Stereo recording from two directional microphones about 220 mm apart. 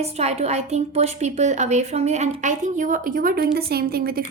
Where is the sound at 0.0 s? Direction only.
30° right (ahead or behind).